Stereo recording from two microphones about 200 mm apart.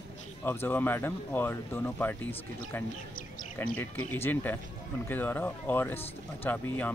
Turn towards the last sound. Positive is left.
turn(degrees=10)  # may be behind; listen again after turning